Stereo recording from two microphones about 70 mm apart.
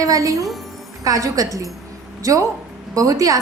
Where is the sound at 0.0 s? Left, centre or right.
Right.